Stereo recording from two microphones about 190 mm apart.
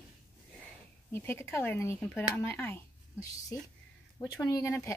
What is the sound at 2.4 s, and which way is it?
Speech, 10° left (ahead or behind).